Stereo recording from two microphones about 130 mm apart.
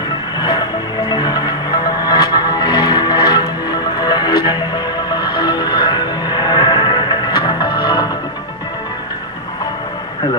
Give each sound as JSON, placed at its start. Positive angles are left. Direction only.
{"t": 0.4, "sound": "music", "side_deg": 30}